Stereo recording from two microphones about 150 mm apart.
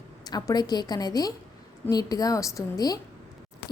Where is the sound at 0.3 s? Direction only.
25° left (ahead or behind).